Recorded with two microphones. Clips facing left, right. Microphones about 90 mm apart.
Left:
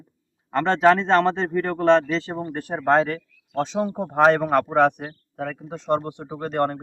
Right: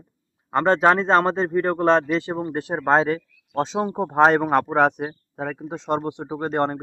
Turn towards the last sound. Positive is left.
turn(degrees=-20)  # may be behind; listen again after turning